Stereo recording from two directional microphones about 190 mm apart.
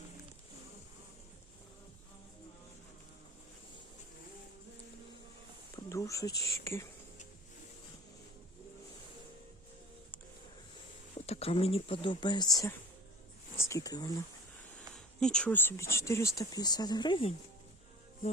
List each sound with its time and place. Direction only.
5.7 s a sound: 15° left (ahead or behind)
6.4 s speech: 15° left (ahead or behind)
11.3 s speech: 30° left (ahead or behind)
14.8 s speech: 5° left (ahead or behind); by 17.3 s 25° left (ahead or behind)